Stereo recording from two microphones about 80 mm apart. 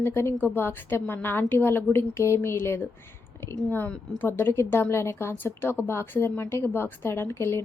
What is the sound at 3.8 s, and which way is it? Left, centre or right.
A woman's voice, left.